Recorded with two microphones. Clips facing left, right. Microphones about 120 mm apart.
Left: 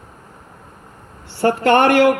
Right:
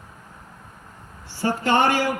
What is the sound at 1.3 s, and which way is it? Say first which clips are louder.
Speech: left 7 dB; 65° left (ahead or behind).